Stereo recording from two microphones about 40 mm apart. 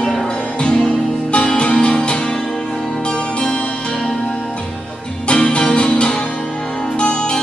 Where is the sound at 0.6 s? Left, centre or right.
Left.